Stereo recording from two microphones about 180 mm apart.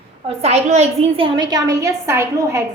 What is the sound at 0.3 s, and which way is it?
A woman's voice, 35° right (ahead or behind).